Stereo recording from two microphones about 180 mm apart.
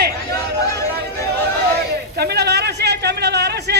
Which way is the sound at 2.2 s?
65° right (ahead or behind).